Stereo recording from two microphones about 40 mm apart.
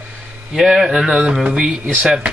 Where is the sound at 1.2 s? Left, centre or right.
Right.